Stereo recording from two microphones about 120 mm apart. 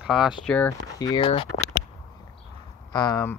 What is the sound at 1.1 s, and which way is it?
Speech, 50° left (ahead or behind).